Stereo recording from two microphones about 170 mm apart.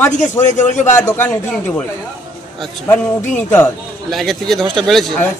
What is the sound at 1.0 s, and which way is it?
Speech, 10° left (ahead or behind).